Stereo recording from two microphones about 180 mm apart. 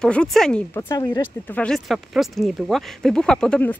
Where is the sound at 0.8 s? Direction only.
20° left (ahead or behind).